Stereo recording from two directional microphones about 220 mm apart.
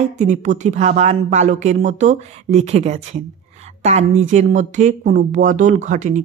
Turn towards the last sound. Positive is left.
turn(degrees=-35)  # may be behind; listen again after turning